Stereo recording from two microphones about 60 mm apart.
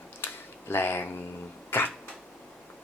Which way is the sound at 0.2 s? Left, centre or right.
Left.